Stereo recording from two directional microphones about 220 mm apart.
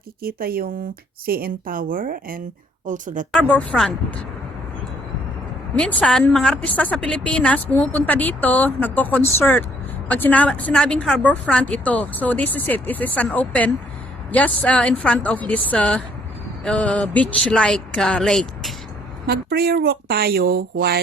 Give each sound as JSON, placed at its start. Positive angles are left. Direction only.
{"t": 0.2, "sound": "a woman's voice", "side_deg": -40}
{"t": 3.5, "sound": "speech", "side_deg": 5}
{"t": 5.7, "sound": "speech", "side_deg": 5}
{"t": 19.3, "sound": "speech", "side_deg": -45}